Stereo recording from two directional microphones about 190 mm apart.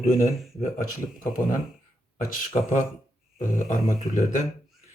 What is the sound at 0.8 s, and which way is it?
Speech, 45° left (ahead or behind).